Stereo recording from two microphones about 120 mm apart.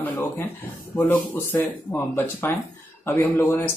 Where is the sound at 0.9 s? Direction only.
20° left (ahead or behind).